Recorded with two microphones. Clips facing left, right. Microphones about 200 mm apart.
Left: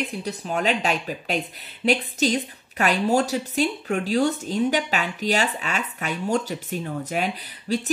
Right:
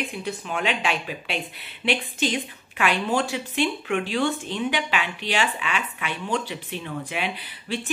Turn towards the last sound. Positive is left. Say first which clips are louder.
# left 4 dB
turn(degrees=40)  # may be behind; listen again after turning